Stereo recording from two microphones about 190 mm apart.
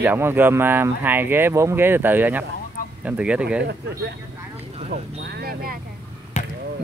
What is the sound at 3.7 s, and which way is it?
Speech, 60° right (ahead or behind).